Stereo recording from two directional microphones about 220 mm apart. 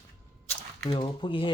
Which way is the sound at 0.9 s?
20° left (ahead or behind).